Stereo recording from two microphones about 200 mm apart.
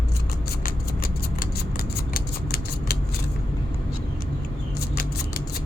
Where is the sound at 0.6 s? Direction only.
45° left (ahead or behind).